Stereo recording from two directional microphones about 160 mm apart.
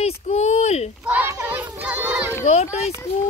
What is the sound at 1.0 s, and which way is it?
Children playing, 10° right (ahead or behind).